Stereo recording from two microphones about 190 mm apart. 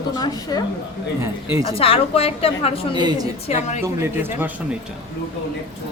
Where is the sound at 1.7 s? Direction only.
30° left (ahead or behind).